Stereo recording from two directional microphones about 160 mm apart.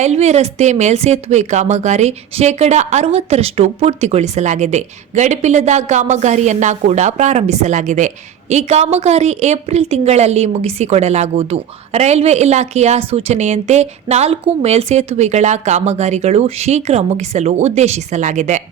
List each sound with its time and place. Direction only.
0.0 s speech: 45° right (ahead or behind)